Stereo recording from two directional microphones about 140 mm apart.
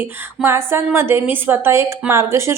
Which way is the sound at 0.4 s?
20° right (ahead or behind).